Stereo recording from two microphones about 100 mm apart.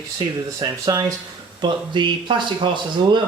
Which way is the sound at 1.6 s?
50° right (ahead or behind).